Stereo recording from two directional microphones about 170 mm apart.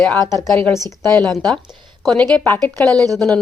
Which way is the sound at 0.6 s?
15° left (ahead or behind).